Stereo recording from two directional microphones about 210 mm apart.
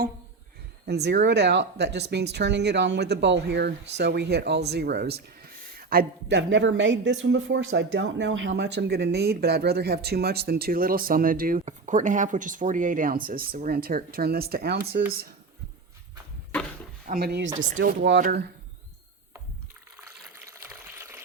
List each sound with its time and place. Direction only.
0.9 s speech: 50° right (ahead or behind)
17.1 s speech: 45° right (ahead or behind)
20.5 s water: 10° right (ahead or behind)